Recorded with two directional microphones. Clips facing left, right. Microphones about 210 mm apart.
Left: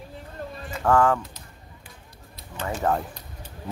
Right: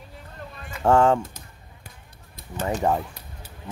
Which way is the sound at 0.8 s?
25° right (ahead or behind).